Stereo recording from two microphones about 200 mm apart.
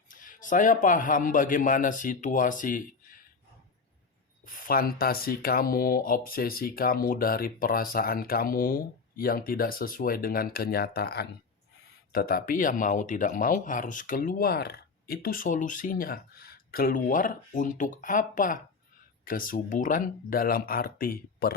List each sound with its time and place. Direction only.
0.1 s a man's voice: 40° left (ahead or behind)
4.4 s speech: 45° left (ahead or behind)